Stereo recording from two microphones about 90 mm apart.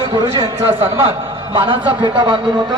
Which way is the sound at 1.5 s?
70° right (ahead or behind).